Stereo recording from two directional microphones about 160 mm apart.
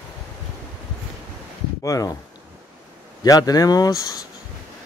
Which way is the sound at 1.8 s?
20° left (ahead or behind).